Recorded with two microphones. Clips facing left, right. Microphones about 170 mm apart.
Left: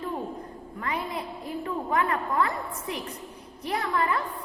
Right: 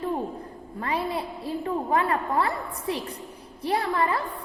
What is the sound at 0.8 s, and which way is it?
A woman's voice, 30° right (ahead or behind).